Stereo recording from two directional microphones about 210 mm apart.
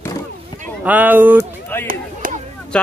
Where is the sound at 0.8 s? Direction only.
10° right (ahead or behind).